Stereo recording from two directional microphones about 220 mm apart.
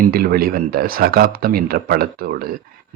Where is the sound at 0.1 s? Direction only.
45° right (ahead or behind).